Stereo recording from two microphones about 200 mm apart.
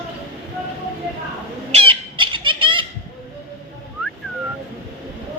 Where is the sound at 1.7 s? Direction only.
30° right (ahead or behind).